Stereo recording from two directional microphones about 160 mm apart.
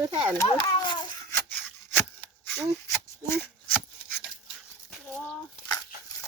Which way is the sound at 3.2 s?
15° left (ahead or behind).